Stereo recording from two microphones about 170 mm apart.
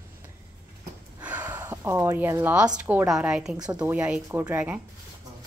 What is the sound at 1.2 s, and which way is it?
Gasp, 10° right (ahead or behind).